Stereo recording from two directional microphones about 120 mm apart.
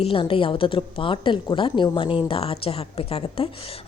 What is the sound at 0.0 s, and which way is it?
Speech, 45° left (ahead or behind).